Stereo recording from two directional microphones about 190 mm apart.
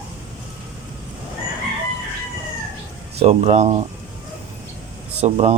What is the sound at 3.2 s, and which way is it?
Speech, 35° right (ahead or behind).